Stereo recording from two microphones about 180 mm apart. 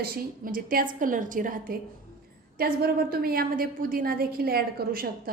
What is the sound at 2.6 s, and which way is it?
A woman's voice, 55° right (ahead or behind).